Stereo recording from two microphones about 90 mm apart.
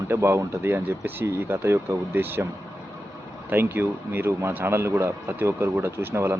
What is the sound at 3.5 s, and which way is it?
Speech, 20° right (ahead or behind).